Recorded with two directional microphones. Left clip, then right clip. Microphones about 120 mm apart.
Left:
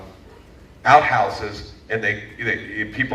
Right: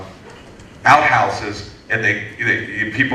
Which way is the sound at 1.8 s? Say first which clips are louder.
Right 5 dB; 45° right (ahead or behind).